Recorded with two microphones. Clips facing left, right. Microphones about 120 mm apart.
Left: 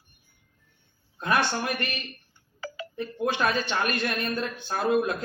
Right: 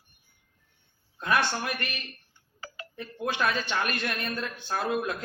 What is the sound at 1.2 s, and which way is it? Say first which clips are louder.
Speech: left 1 dB; 30° left (ahead or behind).